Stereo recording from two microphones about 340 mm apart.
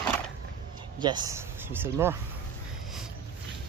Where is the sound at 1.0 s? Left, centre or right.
Centre.